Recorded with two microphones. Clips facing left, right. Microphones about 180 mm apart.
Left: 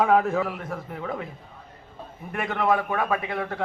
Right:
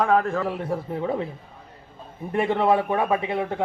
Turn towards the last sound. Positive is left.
turn(degrees=-20)  # may be behind; listen again after turning